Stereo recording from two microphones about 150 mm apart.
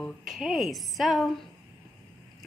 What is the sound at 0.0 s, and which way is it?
A woman's voice, centre (ahead or behind).